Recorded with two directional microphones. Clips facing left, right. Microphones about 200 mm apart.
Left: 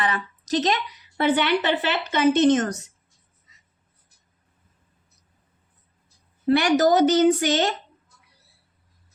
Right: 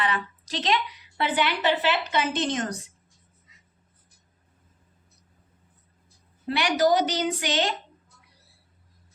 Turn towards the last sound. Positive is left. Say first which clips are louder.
# left 8 dB
turn(degrees=45)  # may be behind; listen again after turning